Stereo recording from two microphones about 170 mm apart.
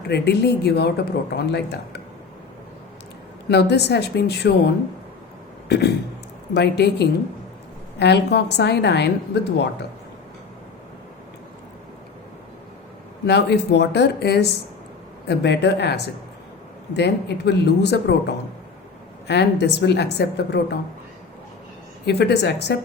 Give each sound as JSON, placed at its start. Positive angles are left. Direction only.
{"t": 0.1, "sound": "speech", "side_deg": 75}
{"t": 3.5, "sound": "speech", "side_deg": 75}
{"t": 5.6, "sound": "a sound", "side_deg": 75}
{"t": 6.5, "sound": "a woman's voice", "side_deg": 75}
{"t": 13.2, "sound": "speech", "side_deg": 75}
{"t": 15.3, "sound": "a woman's voice", "side_deg": 85}
{"t": 22.0, "sound": "speech", "side_deg": 75}